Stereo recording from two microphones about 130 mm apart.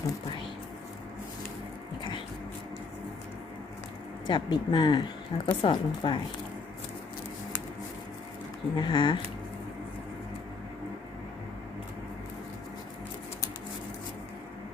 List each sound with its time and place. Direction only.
2.0 s a sound: 35° left (ahead or behind)
4.3 s speech: 35° left (ahead or behind)
8.7 s speech: 35° left (ahead or behind)